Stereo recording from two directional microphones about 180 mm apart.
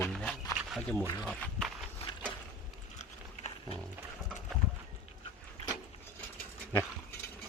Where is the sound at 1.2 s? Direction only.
5° left (ahead or behind).